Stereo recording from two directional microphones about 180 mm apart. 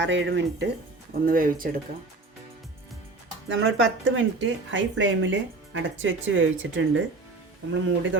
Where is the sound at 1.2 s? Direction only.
50° right (ahead or behind).